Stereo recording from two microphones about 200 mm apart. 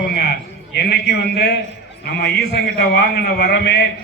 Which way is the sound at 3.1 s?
55° left (ahead or behind).